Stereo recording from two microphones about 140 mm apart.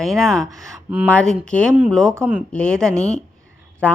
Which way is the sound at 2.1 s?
15° right (ahead or behind).